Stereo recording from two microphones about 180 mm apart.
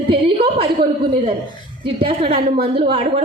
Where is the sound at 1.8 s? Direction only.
30° right (ahead or behind).